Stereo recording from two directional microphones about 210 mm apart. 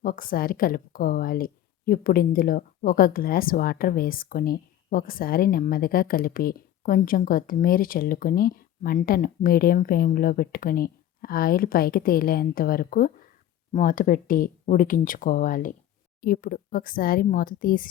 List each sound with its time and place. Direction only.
0.0 s a woman's voice: 40° left (ahead or behind)